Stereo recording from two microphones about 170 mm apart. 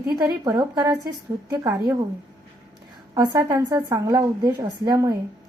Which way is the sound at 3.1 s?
20° right (ahead or behind).